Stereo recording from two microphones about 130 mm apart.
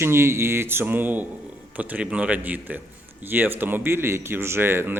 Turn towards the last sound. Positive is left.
turn(degrees=-15)  # may be behind; listen again after turning